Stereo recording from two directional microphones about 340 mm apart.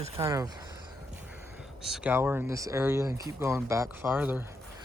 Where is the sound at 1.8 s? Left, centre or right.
Centre.